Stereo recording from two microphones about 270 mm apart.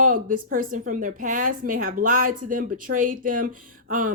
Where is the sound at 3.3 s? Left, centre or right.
Right.